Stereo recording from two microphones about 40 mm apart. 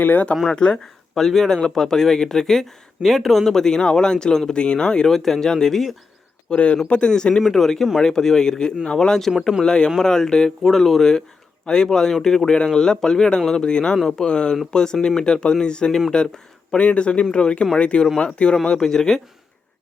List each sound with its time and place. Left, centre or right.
0.0 s speech: left
0.5 s speech: left
1.1 s speech: centre
3.5 s speech: centre
5.1 s speech: centre
6.5 s speech: left
7.1 s speech: centre
9.4 s speech: centre
9.6 s speech: left
10.6 s speech: centre
11.6 s speech: centre
13.9 s speech: centre
14.3 s speech: left